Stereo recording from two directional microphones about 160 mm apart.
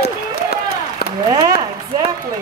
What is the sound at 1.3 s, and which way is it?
Speech, 25° right (ahead or behind).